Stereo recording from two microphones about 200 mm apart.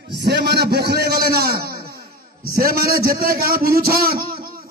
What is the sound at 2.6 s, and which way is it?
A man's voice, 50° right (ahead or behind).